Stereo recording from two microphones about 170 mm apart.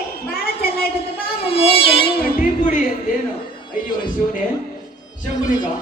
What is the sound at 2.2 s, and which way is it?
Music, 55° left (ahead or behind).